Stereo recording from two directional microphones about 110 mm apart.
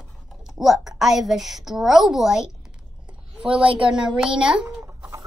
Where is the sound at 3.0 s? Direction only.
10° right (ahead or behind).